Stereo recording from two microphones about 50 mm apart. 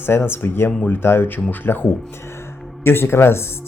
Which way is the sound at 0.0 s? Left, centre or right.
Left.